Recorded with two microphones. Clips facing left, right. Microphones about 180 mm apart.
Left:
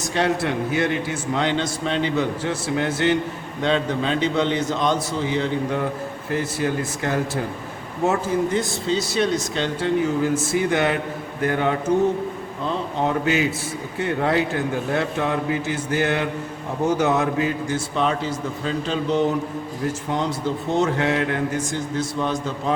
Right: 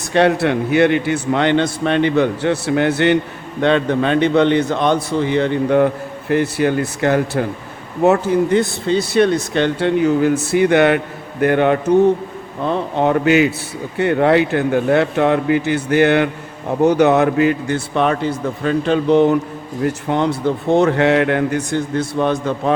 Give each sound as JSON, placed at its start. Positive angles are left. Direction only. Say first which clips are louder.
{"t": 0.1, "sound": "a man's voice", "louder": "right 8 dB", "side_deg": -65}